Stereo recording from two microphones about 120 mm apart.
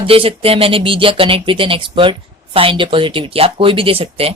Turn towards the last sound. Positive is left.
turn(degrees=-55)  # may be behind; listen again after turning